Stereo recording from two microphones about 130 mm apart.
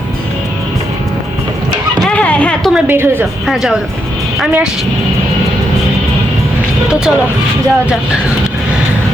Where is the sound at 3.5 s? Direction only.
5° right (ahead or behind).